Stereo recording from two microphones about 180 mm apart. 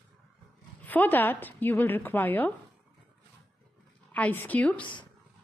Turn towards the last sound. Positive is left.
turn(degrees=10)  # may be behind; listen again after turning